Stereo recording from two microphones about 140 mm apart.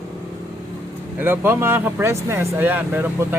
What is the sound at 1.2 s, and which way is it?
Speech, 15° right (ahead or behind).